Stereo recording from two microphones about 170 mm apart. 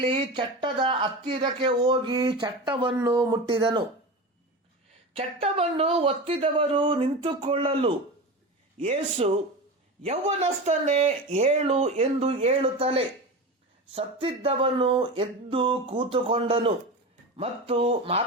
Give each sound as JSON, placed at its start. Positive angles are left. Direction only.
{"t": 0.0, "sound": "speech", "side_deg": -30}
{"t": 5.1, "sound": "speech", "side_deg": -35}